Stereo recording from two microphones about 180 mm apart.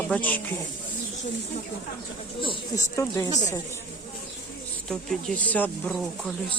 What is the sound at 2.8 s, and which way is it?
Speech, 15° left (ahead or behind).